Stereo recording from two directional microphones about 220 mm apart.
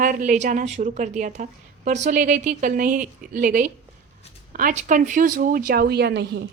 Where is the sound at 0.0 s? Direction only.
40° right (ahead or behind).